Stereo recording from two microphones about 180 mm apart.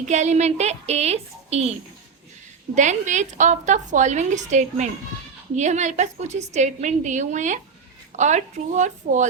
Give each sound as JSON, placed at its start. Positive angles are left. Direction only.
{"t": 0.0, "sound": "a woman's voice", "side_deg": -40}
{"t": 2.7, "sound": "a woman's voice", "side_deg": -40}